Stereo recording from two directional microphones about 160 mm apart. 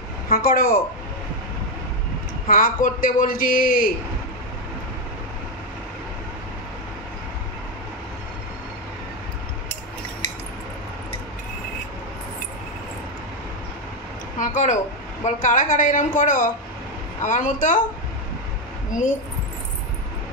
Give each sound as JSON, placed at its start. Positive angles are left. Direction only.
{"t": 0.3, "sound": "speech", "side_deg": 65}
{"t": 2.4, "sound": "a man's voice", "side_deg": 55}
{"t": 14.4, "sound": "a woman's voice", "side_deg": 50}